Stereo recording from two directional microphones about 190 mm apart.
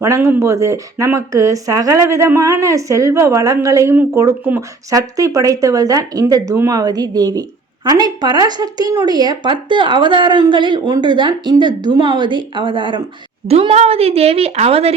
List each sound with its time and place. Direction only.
0.0 s a woman's voice: 15° right (ahead or behind); by 14.9 s 30° right (ahead or behind)